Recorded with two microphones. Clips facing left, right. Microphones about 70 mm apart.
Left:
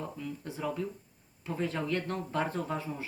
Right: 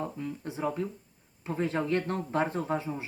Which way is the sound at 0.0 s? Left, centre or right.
Right.